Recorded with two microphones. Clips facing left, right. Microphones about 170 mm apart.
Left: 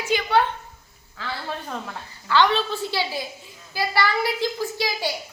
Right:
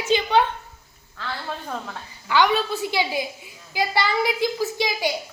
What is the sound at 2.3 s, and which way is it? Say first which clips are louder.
A woman's voice: even; 10° right (ahead or behind).